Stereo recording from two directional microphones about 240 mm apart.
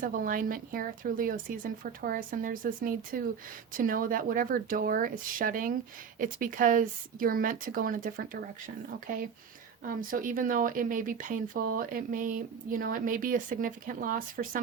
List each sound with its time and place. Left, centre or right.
0.0 s speech: right